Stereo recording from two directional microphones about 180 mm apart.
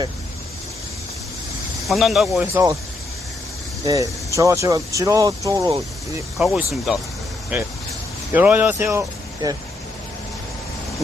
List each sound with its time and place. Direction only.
1.9 s speech: centre (ahead or behind)
3.8 s speech: 20° right (ahead or behind)
6.3 s speech: centre (ahead or behind); by 9.6 s 20° right (ahead or behind)